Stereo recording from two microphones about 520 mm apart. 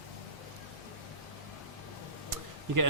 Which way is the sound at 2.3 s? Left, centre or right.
Right.